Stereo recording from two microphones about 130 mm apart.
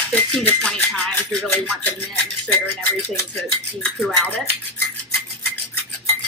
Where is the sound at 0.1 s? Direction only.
10° left (ahead or behind).